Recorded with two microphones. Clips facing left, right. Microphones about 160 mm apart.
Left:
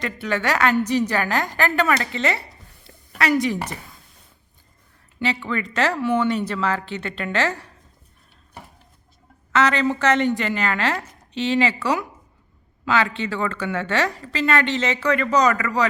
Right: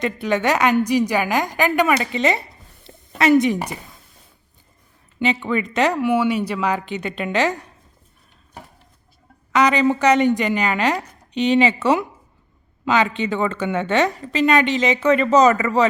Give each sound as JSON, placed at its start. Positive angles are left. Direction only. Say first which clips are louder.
{"t": 0.0, "sound": "a woman's voice", "louder": "right 4 dB", "side_deg": -20}
{"t": 2.8, "sound": "a sound", "louder": "right 5 dB", "side_deg": -25}
{"t": 5.2, "sound": "a woman's voice", "louder": "right 4 dB", "side_deg": -20}
{"t": 9.5, "sound": "a woman's voice", "louder": "right 3 dB", "side_deg": -15}